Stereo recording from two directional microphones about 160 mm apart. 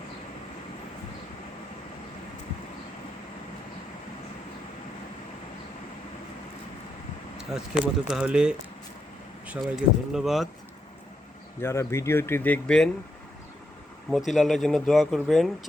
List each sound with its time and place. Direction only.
7.3 s speech: 5° right (ahead or behind)
11.6 s speech: 15° left (ahead or behind)
14.1 s speech: centre (ahead or behind)